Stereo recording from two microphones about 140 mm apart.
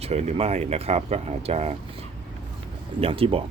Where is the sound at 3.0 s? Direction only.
40° right (ahead or behind).